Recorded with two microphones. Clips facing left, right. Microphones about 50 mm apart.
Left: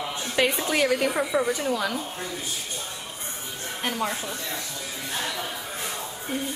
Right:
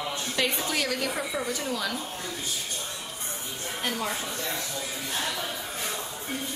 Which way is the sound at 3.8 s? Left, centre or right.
Centre.